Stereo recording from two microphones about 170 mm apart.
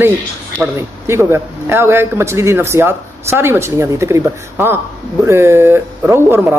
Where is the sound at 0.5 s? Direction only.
10° right (ahead or behind).